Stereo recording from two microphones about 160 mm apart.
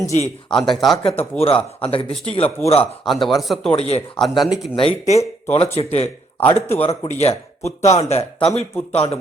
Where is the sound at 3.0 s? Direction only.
Centre (ahead or behind).